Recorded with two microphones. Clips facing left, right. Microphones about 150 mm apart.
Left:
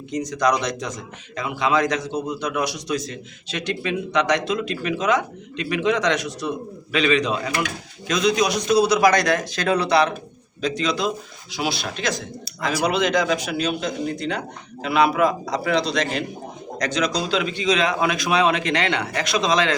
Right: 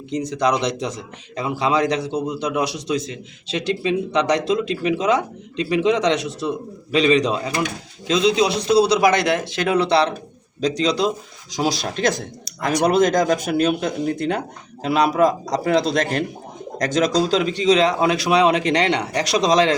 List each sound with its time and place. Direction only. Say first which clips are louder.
0.1 s a man's voice: right 1 dB; 30° right (ahead or behind)